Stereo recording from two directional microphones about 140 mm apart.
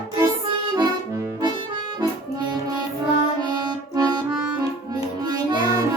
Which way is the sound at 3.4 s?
30° right (ahead or behind).